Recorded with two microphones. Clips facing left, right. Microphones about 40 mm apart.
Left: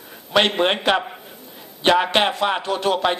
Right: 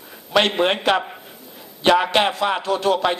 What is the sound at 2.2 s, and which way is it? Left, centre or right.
Speech, left.